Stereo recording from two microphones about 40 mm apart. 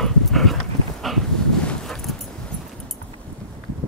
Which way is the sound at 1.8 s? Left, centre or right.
Centre.